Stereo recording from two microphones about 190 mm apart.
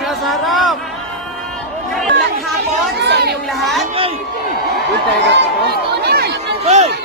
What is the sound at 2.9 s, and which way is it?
Chatter, 60° right (ahead or behind).